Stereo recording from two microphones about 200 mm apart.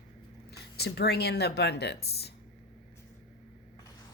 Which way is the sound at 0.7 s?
55° left (ahead or behind).